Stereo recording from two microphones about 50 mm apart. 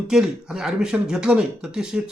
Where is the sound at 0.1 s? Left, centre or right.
Centre.